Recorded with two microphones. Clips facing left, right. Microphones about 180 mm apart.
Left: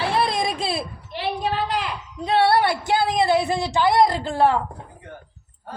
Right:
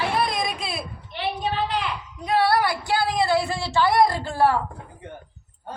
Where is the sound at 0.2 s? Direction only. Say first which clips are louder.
Left 3 dB; 30° left (ahead or behind).